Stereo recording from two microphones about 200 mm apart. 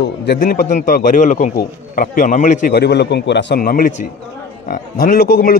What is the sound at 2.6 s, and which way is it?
A man's voice, 55° left (ahead or behind).